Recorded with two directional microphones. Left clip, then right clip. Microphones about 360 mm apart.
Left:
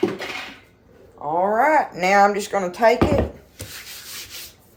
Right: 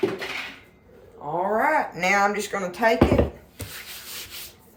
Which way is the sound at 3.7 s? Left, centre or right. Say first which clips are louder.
Left 2 dB; centre.